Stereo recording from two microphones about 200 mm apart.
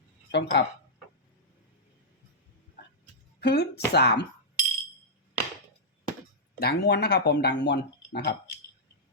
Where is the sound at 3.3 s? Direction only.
55° left (ahead or behind).